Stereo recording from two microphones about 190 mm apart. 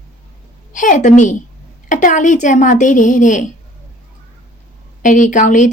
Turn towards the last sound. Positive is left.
turn(degrees=40)  # may be behind; listen again after turning